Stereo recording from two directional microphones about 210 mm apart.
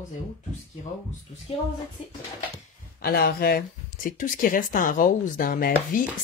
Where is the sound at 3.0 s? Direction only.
45° left (ahead or behind).